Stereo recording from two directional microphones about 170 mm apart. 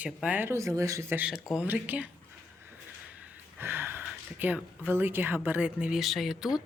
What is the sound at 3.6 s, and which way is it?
A woman's voice, 15° right (ahead or behind).